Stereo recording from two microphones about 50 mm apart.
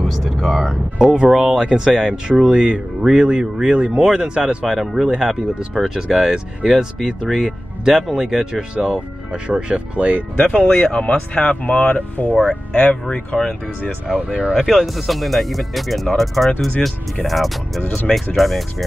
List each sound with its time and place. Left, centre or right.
0.0 s speech: centre
0.6 s speech: centre
4.6 s speech: centre
8.7 s speech: right
10.3 s speech: centre
14.1 s speech: centre